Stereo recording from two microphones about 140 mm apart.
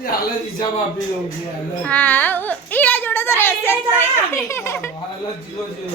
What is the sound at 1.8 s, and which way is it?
A child's voice, 10° left (ahead or behind).